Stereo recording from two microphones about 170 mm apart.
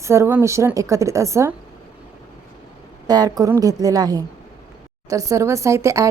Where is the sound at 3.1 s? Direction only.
25° right (ahead or behind).